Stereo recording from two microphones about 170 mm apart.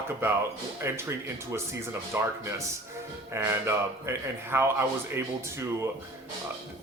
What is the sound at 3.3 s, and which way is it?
Speech, 15° right (ahead or behind).